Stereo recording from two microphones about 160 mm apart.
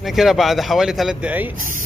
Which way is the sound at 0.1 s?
Centre (ahead or behind).